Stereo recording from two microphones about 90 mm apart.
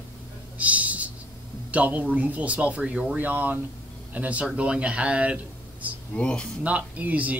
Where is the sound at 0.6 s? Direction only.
15° right (ahead or behind).